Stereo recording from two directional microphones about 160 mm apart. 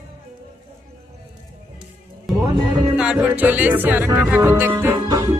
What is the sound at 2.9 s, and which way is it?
Music, 5° right (ahead or behind).